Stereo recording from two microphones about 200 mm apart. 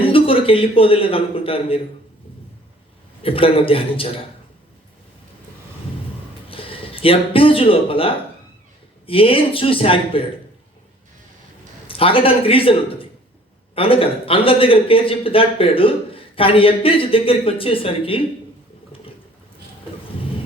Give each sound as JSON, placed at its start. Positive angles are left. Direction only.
{"t": 0.0, "sound": "a man's voice", "side_deg": 25}
{"t": 3.2, "sound": "speech", "side_deg": 25}
{"t": 6.5, "sound": "a man's voice", "side_deg": 25}
{"t": 11.9, "sound": "a man's voice", "side_deg": 25}